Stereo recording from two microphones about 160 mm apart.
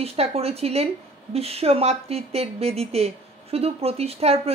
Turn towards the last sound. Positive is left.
turn(degrees=-40)  # may be behind; listen again after turning